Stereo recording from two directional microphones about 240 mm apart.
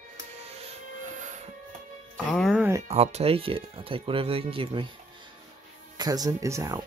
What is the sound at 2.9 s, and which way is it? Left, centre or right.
Speech, right.